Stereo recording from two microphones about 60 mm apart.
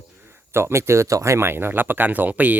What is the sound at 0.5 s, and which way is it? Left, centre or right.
Speech, right.